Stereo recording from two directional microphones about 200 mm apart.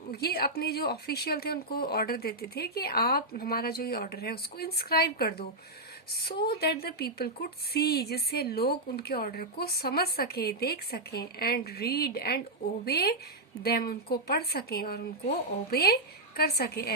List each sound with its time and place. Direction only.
0.1 s speech: 50° left (ahead or behind)